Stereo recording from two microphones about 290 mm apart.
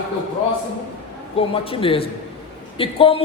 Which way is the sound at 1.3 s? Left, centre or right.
Centre.